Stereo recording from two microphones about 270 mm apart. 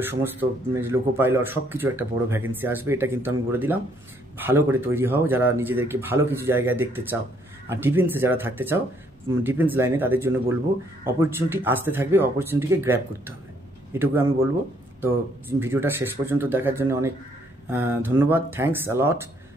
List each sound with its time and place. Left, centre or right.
0.0 s a man's voice: centre
15.6 s a man's voice: centre